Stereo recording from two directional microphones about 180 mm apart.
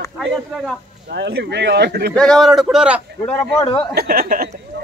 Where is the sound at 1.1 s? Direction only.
65° right (ahead or behind).